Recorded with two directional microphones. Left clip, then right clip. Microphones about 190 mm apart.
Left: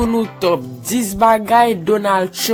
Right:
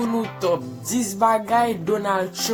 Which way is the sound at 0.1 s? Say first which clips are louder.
Left 6 dB; 45° left (ahead or behind).